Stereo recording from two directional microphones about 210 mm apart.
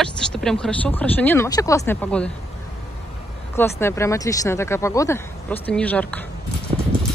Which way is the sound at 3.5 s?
10° left (ahead or behind).